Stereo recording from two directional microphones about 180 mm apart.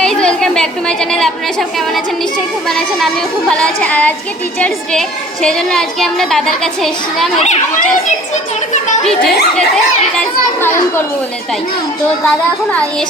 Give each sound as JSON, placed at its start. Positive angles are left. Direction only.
{"t": 0.0, "sound": "a sound", "side_deg": 5}
{"t": 2.6, "sound": "a woman's voice", "side_deg": 0}
{"t": 7.3, "sound": "a child's voice", "side_deg": 40}
{"t": 9.0, "sound": "a woman's voice", "side_deg": 5}